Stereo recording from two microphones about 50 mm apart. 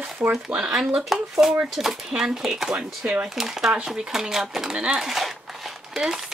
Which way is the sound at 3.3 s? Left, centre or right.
Centre.